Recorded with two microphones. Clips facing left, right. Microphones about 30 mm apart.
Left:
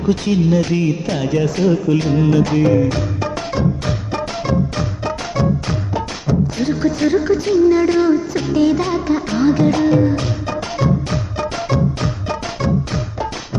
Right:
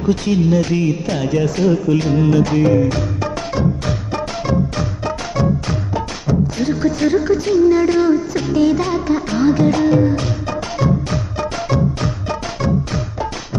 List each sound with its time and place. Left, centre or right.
0.0 s music: left